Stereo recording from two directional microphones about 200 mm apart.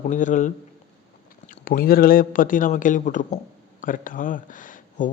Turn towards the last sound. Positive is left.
turn(degrees=40)  # may be behind; listen again after turning